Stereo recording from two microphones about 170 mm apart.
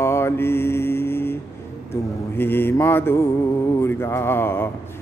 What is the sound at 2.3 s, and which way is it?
Mantra, 10° left (ahead or behind).